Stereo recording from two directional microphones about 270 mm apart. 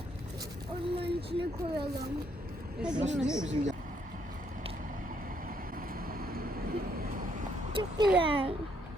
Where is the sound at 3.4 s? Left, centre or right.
Right.